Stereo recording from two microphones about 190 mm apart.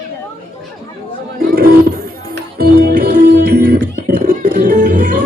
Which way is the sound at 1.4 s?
50° right (ahead or behind).